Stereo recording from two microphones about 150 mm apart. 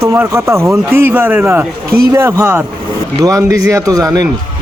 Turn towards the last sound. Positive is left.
turn(degrees=-25)  # may be behind; listen again after turning